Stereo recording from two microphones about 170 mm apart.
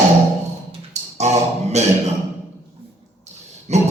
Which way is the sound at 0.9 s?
40° right (ahead or behind).